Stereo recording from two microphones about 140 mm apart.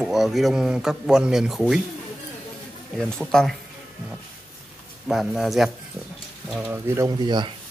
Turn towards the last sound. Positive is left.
turn(degrees=-35)  # may be behind; listen again after turning